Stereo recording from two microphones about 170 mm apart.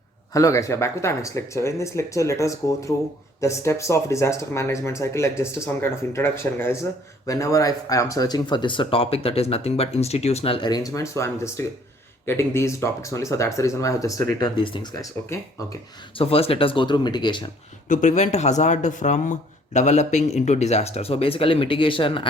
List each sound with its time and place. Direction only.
0.3 s speech: 20° left (ahead or behind)
16.1 s speech: 35° left (ahead or behind)
17.8 s speech: 45° left (ahead or behind); by 22.3 s 30° left (ahead or behind)